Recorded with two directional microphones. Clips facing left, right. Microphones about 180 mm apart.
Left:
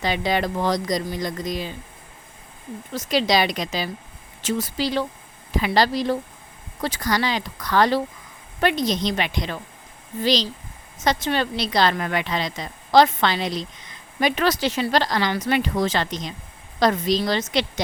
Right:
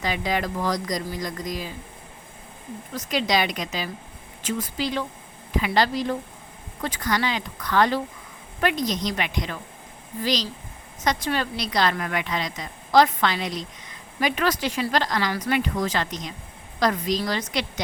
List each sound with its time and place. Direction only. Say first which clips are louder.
0.3 s speech: left 3 dB; 30° left (ahead or behind)
3.1 s a woman's voice: left 3 dB; 30° left (ahead or behind)
4.4 s speech: left 3 dB; 80° left
4.8 s a woman's voice: left 3 dB; 35° left (ahead or behind)
8.7 s a woman's voice: left 3 dB; 90° left
9.0 s speech: left 3 dB; 30° left (ahead or behind)